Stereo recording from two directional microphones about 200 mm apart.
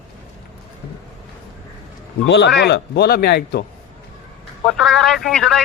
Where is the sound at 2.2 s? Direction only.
60° left (ahead or behind).